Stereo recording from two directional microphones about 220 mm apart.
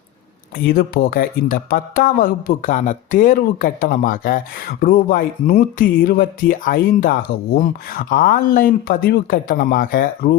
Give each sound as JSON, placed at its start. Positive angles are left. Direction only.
{"t": 0.6, "sound": "speech", "side_deg": 45}